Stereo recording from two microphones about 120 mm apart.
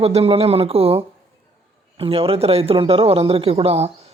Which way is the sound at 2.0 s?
55° right (ahead or behind).